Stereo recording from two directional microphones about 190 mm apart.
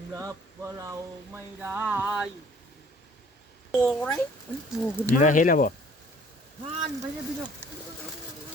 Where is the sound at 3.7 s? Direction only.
5° left (ahead or behind).